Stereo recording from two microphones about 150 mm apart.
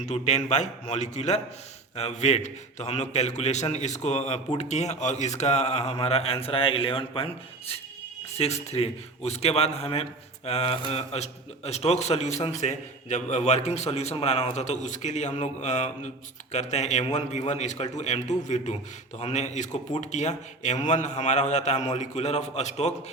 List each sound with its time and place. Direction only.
0.0 s a man's voice: 50° left (ahead or behind)